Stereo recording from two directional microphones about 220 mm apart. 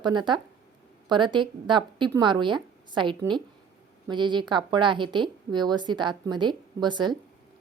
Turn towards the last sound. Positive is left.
turn(degrees=-20)  # may be behind; listen again after turning